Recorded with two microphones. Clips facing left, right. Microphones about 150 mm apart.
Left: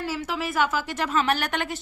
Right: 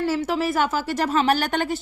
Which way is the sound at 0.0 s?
35° right (ahead or behind).